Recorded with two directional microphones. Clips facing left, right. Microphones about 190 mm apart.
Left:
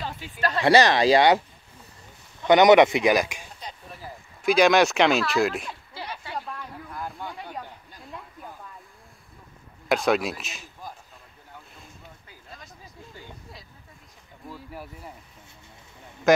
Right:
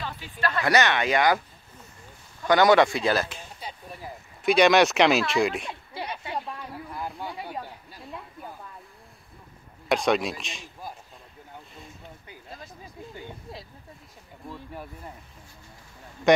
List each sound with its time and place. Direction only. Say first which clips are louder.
0.4 s speech: left 4 dB; 30° left (ahead or behind)
2.4 s speech: left 4 dB; 20° left (ahead or behind)
4.4 s speech: even; centre (ahead or behind)
5.9 s a sound: right 2 dB; 20° right (ahead or behind); by 8.5 s centre (ahead or behind)
9.8 s speech: left 1 dB; 5° left (ahead or behind)
14.5 s speech: even; 5° left (ahead or behind)
16.3 s speech: even; centre (ahead or behind)